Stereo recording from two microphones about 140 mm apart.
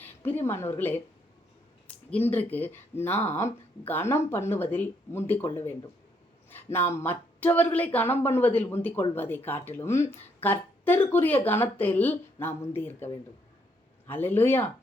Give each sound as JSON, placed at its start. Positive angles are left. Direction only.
{"t": 0.2, "sound": "speech", "side_deg": 15}
{"t": 2.0, "sound": "speech", "side_deg": 10}
{"t": 6.5, "sound": "speech", "side_deg": 15}